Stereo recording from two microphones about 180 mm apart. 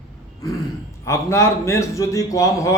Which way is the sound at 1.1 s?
15° left (ahead or behind).